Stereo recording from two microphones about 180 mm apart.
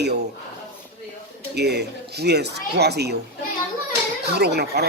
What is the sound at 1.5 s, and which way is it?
Speech, 65° right (ahead or behind).